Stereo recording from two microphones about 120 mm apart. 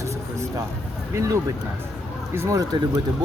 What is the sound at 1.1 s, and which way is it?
Speech, 25° right (ahead or behind).